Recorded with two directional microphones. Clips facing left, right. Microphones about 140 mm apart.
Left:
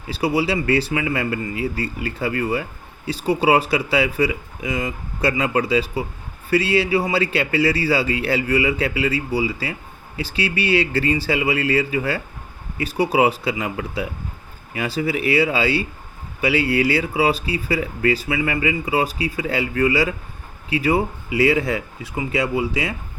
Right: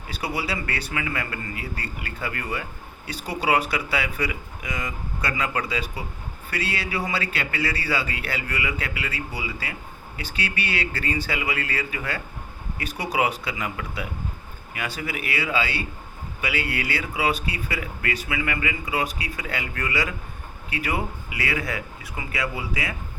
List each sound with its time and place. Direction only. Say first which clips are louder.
0.1 s speech: left 9 dB; 30° left (ahead or behind)